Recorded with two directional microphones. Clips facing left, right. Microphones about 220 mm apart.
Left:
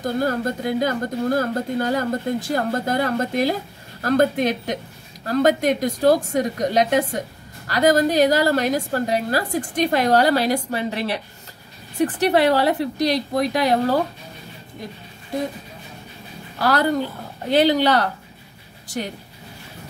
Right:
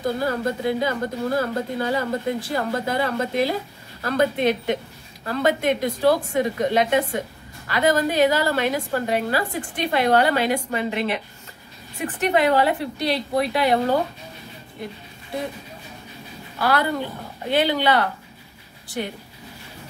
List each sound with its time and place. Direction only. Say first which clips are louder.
0.0 s a woman's voice: left 1 dB; 45° left (ahead or behind)
16.5 s a woman's voice: left 3 dB; 40° left (ahead or behind)